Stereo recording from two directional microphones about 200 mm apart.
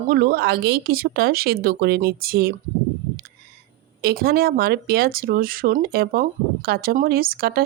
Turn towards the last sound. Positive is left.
turn(degrees=-50)  # may be behind; listen again after turning